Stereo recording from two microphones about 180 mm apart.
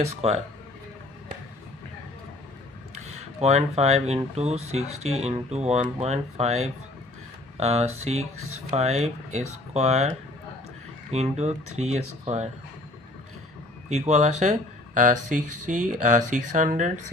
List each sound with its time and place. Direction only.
0.2 s speech: 35° right (ahead or behind)
3.4 s speech: 35° right (ahead or behind)
11.1 s speech: 35° right (ahead or behind)
14.1 s speech: 40° right (ahead or behind)